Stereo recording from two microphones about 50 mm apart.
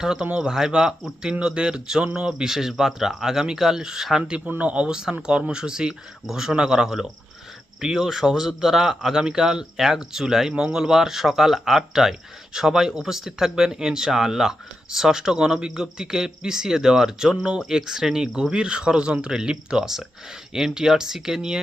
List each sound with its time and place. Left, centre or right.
0.0 s speech: centre
4.4 s speech: right